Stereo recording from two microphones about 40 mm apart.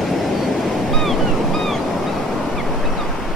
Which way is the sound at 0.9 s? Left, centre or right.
Centre.